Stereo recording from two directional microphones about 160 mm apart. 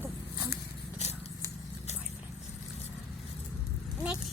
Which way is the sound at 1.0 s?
40° left (ahead or behind).